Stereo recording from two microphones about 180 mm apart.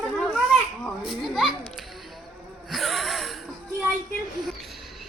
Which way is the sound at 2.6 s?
Centre (ahead or behind).